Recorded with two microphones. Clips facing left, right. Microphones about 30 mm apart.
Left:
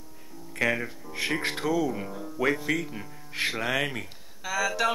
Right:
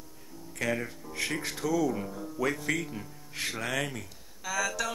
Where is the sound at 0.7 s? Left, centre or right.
Centre.